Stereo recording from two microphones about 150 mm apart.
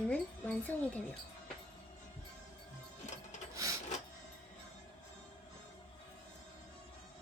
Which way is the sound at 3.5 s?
20° right (ahead or behind).